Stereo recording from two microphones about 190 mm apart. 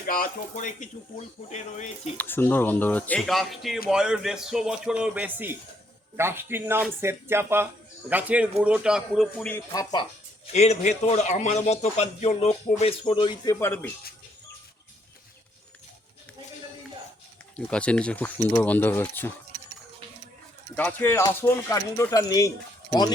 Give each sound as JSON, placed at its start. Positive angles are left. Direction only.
{"t": 0.0, "sound": "speech", "side_deg": 45}
{"t": 2.1, "sound": "speech", "side_deg": 10}
{"t": 9.7, "sound": "speech", "side_deg": 25}
{"t": 17.7, "sound": "speech", "side_deg": 5}
{"t": 20.7, "sound": "speech", "side_deg": 10}